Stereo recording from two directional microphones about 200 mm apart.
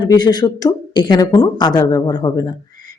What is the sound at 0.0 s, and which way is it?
Speech, 20° left (ahead or behind).